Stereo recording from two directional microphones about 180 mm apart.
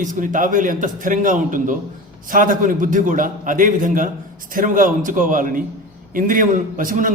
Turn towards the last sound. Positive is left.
turn(degrees=-50)  # may be behind; listen again after turning